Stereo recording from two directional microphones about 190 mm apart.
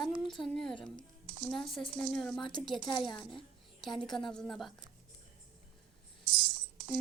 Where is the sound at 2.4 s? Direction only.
25° left (ahead or behind).